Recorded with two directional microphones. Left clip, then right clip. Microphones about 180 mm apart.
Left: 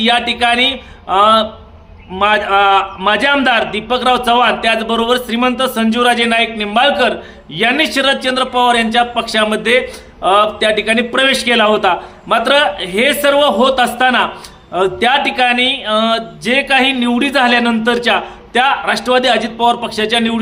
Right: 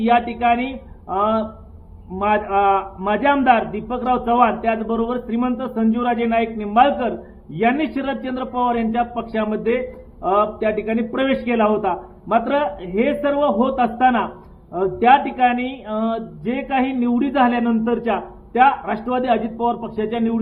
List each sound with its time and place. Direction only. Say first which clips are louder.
0.0 s speech: left 4 dB; 20° left (ahead or behind)